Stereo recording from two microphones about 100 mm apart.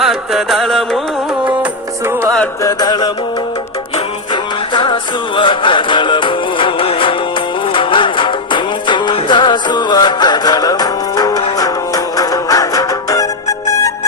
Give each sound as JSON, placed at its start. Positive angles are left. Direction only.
{"t": 0.0, "sound": "music", "side_deg": 0}
{"t": 2.6, "sound": "music", "side_deg": 40}
{"t": 4.7, "sound": "music", "side_deg": 50}